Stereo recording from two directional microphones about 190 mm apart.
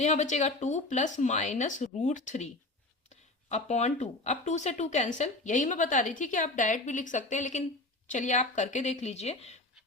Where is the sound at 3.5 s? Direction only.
35° left (ahead or behind).